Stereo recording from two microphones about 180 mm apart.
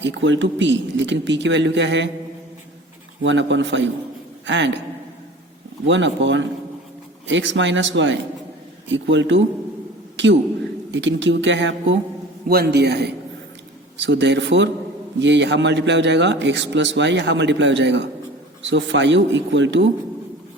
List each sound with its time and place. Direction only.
0.0 s speech: 90° right
3.2 s speech: 90° right
4.4 s speech: 80° right
5.8 s a man's voice: 90° right
12.5 s a man's voice: 60° right (ahead or behind)
14.0 s a man's voice: 80° right
18.6 s speech: 90° right